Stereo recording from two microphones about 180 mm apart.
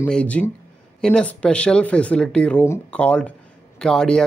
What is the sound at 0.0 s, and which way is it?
Speech, 5° left (ahead or behind).